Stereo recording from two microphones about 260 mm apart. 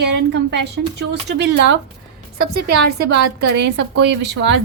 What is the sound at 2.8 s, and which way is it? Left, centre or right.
A woman's voice, right.